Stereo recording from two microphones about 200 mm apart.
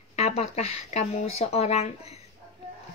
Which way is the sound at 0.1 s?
30° left (ahead or behind).